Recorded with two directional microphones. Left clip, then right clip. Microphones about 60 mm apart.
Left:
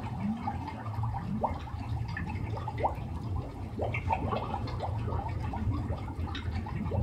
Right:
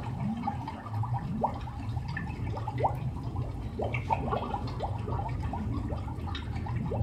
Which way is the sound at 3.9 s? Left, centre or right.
Left.